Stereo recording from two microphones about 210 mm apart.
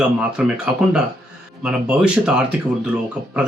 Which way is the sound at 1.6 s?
5° right (ahead or behind).